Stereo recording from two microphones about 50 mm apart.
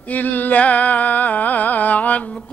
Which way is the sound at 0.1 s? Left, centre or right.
Left.